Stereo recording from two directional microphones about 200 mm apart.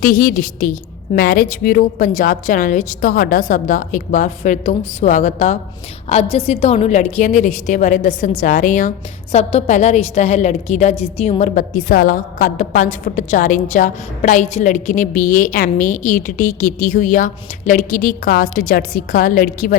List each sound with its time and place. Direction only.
0.0 s a woman's voice: 45° left (ahead or behind)